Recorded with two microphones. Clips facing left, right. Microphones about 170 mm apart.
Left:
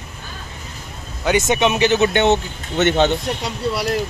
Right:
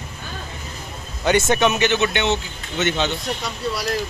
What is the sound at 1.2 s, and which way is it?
Speech, 15° left (ahead or behind).